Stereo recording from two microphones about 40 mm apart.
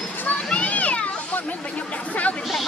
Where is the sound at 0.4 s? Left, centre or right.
Left.